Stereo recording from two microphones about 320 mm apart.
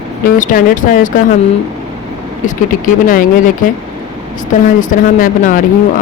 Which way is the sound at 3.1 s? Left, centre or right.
Left.